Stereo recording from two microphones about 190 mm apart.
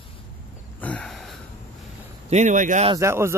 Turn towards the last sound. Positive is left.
turn(degrees=-15)  # may be behind; listen again after turning